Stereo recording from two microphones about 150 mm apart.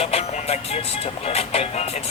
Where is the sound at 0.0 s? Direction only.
45° left (ahead or behind).